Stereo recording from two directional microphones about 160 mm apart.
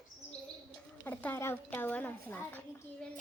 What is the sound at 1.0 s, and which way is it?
A woman's voice, 10° left (ahead or behind).